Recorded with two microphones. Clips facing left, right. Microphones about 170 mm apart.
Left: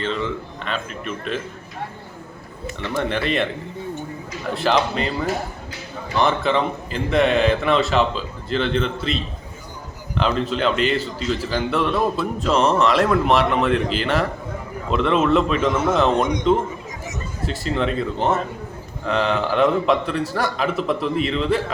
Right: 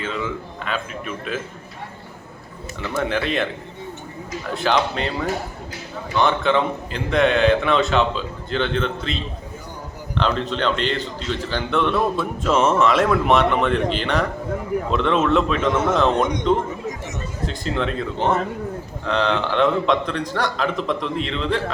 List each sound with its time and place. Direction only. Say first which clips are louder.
0.0 s a man's voice: left 2 dB; 5° right (ahead or behind)
2.8 s a man's voice: even; centre (ahead or behind)
4.5 s a man's voice: left 1 dB; centre (ahead or behind)